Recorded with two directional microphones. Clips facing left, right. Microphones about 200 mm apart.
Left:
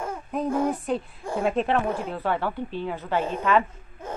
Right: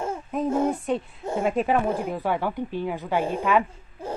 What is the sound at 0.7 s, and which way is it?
A woman's voice, centre (ahead or behind).